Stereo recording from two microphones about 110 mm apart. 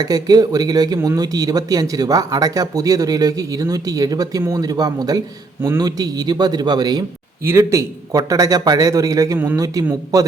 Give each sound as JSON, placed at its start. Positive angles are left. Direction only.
{"t": 0.0, "sound": "speech", "side_deg": -35}
{"t": 7.4, "sound": "speech", "side_deg": -25}